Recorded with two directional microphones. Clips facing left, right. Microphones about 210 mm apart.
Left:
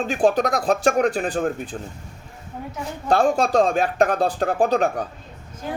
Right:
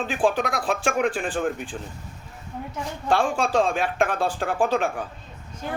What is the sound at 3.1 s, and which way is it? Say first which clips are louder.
Speech: left 4 dB; 40° left (ahead or behind).